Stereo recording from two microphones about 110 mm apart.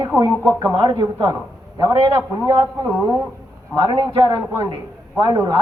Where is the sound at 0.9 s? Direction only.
40° right (ahead or behind).